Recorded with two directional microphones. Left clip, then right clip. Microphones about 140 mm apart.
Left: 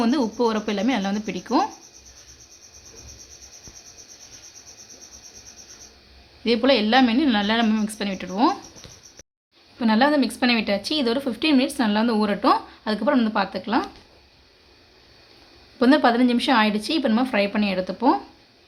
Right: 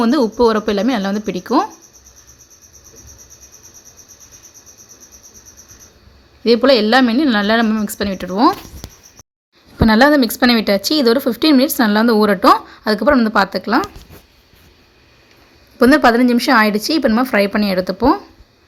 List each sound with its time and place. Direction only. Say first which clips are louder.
0.0 s speech: right 8 dB; 35° right (ahead or behind)
6.4 s speech: right 8 dB; 30° right (ahead or behind)
7.9 s speech: right 7 dB; 35° right (ahead or behind)
9.7 s speech: right 8 dB; 45° right (ahead or behind)
16.0 s speech: right 7 dB; 35° right (ahead or behind)